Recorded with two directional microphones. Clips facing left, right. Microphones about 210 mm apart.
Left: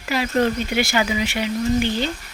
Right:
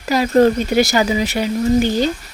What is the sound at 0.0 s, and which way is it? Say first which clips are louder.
Speech: right 7 dB; 40° right (ahead or behind).